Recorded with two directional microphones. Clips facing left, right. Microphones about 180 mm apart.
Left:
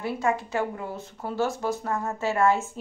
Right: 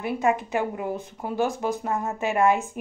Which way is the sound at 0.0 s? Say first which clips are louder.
Right 3 dB; 20° right (ahead or behind).